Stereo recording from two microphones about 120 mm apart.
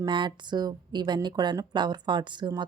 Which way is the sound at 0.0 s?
40° right (ahead or behind).